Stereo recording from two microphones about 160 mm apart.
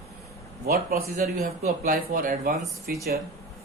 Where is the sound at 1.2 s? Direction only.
60° right (ahead or behind).